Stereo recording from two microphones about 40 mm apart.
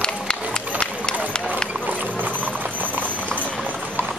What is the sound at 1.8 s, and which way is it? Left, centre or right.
Clip-clop, right.